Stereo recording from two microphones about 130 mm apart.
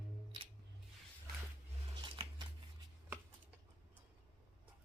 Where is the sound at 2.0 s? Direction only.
40° right (ahead or behind).